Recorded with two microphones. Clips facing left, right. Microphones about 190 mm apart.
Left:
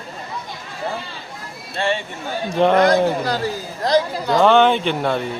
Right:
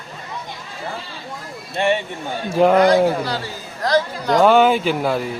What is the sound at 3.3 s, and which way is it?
Speech, 45° left (ahead or behind).